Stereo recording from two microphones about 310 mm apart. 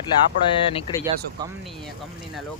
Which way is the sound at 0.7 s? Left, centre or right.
Centre.